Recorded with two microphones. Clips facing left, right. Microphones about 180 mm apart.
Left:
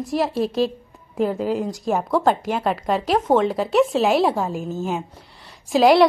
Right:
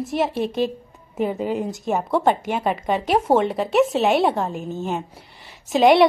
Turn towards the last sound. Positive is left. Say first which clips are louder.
# even
turn(degrees=0)  # may be behind; listen again after turning